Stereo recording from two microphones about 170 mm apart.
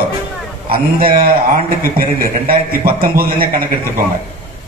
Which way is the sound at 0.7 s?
60° right (ahead or behind).